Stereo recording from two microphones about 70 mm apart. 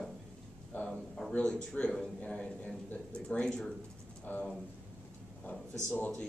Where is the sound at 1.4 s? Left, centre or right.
Centre.